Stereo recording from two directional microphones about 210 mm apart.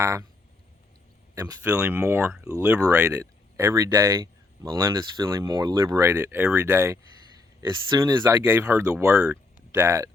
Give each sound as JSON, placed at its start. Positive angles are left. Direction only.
{"t": 0.0, "sound": "speech", "side_deg": -15}
{"t": 1.4, "sound": "speech", "side_deg": -15}